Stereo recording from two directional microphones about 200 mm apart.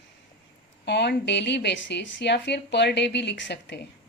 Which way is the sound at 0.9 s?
60° left (ahead or behind).